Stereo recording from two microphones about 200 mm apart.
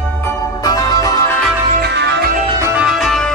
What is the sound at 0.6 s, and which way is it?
Music, 20° left (ahead or behind).